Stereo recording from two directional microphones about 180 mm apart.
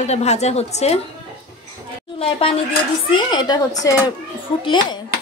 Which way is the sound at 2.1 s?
30° left (ahead or behind).